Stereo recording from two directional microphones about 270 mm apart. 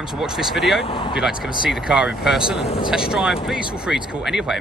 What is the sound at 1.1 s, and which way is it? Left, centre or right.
Speech, centre.